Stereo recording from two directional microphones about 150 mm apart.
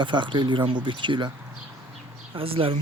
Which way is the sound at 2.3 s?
40° right (ahead or behind).